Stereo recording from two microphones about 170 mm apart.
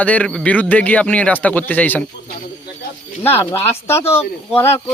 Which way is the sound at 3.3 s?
15° left (ahead or behind).